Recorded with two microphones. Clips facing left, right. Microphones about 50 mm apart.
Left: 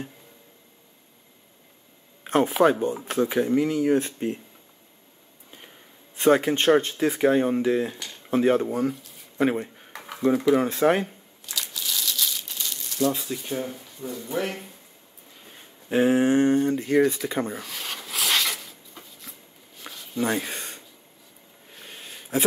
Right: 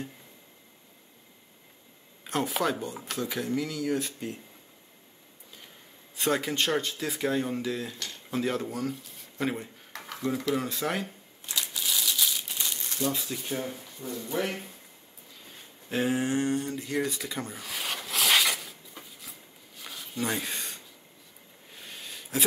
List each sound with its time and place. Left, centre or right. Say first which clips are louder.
2.2 s speech: left 9 dB; left
6.1 s speech: left 8 dB; left
11.5 s crumpling: even; centre
13.1 s speech: left 3 dB; centre
15.4 s speech: left 3 dB; centre
17.6 s a sound: even; centre
20.4 s a sound: left 2 dB; centre